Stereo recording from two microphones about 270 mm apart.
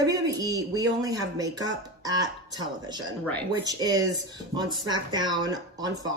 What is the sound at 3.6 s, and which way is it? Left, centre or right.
Speech, centre.